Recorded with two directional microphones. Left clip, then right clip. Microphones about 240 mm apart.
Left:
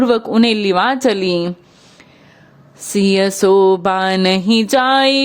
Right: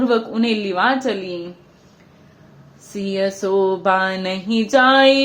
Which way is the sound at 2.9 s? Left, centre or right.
Left.